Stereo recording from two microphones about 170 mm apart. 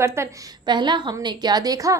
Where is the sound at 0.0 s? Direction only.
15° right (ahead or behind).